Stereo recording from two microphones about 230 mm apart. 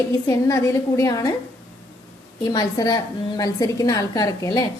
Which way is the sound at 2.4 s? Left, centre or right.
Centre.